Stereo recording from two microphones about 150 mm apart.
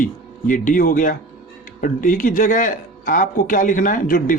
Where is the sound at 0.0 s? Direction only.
60° left (ahead or behind).